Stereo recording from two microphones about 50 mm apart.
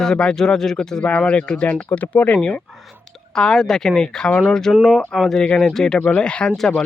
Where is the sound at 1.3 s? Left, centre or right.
Left.